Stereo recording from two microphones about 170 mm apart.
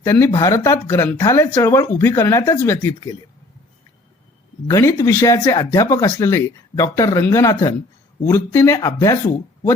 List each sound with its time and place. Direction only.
0.0 s speech: 15° left (ahead or behind)
4.7 s speech: 20° left (ahead or behind)